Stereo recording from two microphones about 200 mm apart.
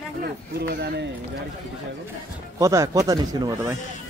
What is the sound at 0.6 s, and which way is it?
Speech, 55° right (ahead or behind).